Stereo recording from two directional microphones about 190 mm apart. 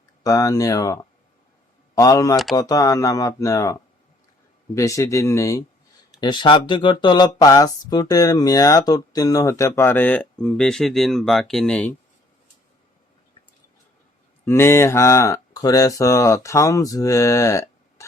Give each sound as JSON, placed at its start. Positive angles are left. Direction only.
{"t": 0.2, "sound": "speech", "side_deg": 15}
{"t": 2.0, "sound": "speech", "side_deg": 15}
{"t": 2.3, "sound": "speech", "side_deg": 0}
{"t": 2.6, "sound": "speech", "side_deg": 20}
{"t": 14.4, "sound": "speech", "side_deg": 15}